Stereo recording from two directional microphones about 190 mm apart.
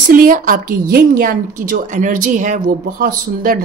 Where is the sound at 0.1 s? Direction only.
45° right (ahead or behind).